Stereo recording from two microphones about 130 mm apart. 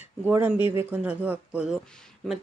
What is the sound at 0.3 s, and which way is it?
Speech, 15° right (ahead or behind).